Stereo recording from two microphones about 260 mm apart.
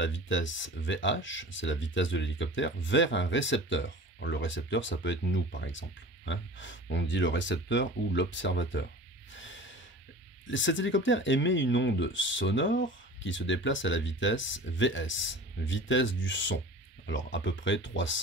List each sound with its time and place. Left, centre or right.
0.0 s speech: left
9.3 s snort: left
10.4 s speech: left